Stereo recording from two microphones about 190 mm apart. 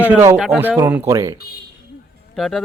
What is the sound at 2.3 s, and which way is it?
Speech, centre (ahead or behind).